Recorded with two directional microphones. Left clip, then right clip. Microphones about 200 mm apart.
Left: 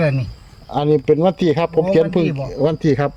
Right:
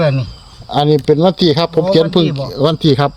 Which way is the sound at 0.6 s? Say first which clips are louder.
Right 3 dB; 30° right (ahead or behind).